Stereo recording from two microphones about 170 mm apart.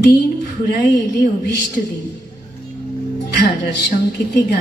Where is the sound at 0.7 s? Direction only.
70° left (ahead or behind).